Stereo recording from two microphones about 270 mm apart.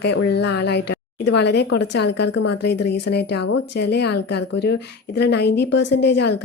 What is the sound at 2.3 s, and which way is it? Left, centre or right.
Speech, left.